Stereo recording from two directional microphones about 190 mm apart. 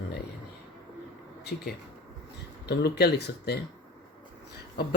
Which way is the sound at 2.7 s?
60° left (ahead or behind).